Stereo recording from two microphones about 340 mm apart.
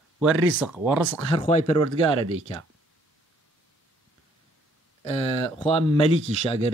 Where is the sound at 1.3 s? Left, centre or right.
Centre.